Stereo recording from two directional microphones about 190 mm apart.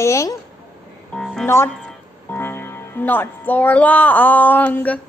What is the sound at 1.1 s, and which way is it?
Music, 5° left (ahead or behind).